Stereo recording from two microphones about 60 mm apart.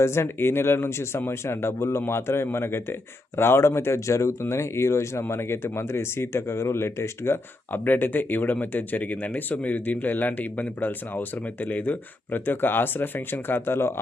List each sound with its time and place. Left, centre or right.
0.0 s speech: left